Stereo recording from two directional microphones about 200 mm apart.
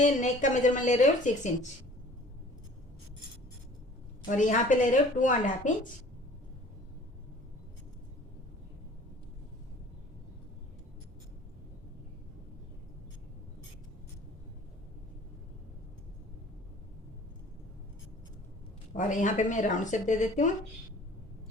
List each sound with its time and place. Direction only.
0.0 s a woman's voice: 40° left (ahead or behind)
4.3 s a woman's voice: 40° left (ahead or behind)
18.9 s a woman's voice: 40° left (ahead or behind)